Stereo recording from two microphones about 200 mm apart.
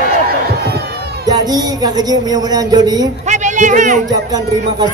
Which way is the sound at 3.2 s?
35° right (ahead or behind).